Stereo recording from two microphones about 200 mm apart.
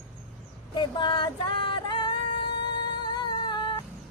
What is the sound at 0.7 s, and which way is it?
Female singing, 20° left (ahead or behind).